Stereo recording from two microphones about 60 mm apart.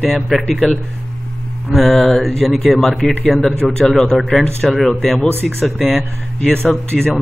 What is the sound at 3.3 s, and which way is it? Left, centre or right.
Speech, centre.